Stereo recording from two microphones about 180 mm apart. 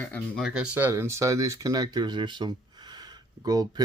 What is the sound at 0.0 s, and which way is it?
Speech, 5° left (ahead or behind).